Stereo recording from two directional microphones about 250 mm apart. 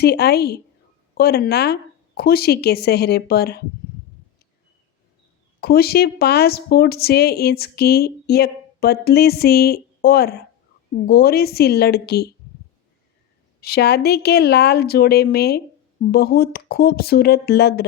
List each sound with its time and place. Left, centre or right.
0.0 s a woman's voice: left
5.5 s a woman's voice: left
13.6 s a woman's voice: left